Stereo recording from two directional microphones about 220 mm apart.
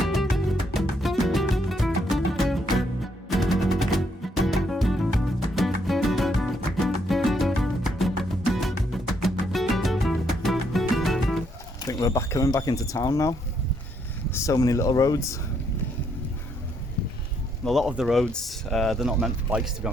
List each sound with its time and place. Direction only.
0.0 s music: centre (ahead or behind)
11.9 s speech: 15° left (ahead or behind)
17.7 s speech: centre (ahead or behind)